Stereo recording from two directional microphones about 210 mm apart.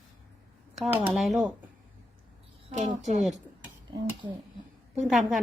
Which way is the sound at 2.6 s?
35° right (ahead or behind).